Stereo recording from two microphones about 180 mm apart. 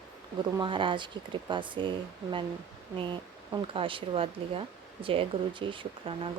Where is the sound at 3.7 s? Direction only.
30° right (ahead or behind).